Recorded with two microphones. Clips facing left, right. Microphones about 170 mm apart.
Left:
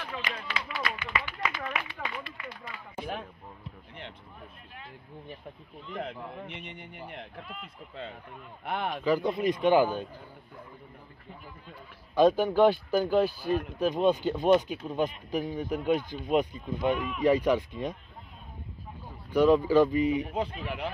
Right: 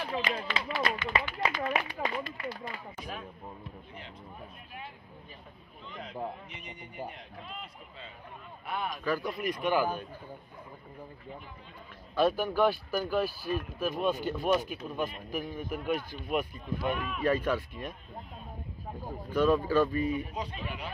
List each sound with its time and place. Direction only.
0.0 s a sound: 30° right (ahead or behind)
6.3 s speech: 65° left (ahead or behind)
7.4 s a man's voice: 25° right (ahead or behind)
8.6 s speech: 65° left (ahead or behind)
9.0 s speech: 20° left (ahead or behind)
12.2 s speech: 20° left (ahead or behind)
19.0 s a sound: 45° right (ahead or behind)
19.3 s speech: 15° left (ahead or behind)
20.3 s speech: 60° left (ahead or behind)